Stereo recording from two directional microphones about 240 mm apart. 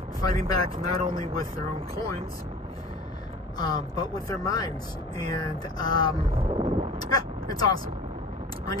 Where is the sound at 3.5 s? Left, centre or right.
Centre.